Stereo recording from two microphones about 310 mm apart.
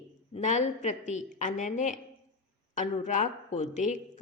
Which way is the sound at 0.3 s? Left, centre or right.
Left.